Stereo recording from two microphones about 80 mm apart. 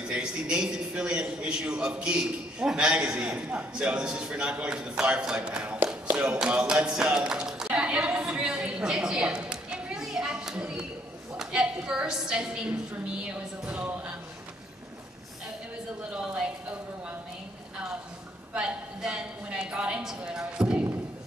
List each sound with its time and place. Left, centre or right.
0.1 s a man's voice: centre
18.5 s a man's voice: centre